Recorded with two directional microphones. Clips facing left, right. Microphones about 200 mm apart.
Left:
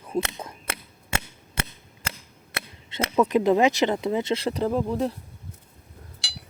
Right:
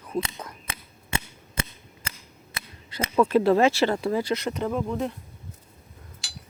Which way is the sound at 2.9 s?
25° left (ahead or behind).